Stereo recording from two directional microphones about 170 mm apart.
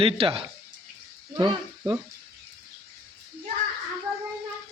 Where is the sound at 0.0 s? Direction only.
30° right (ahead or behind).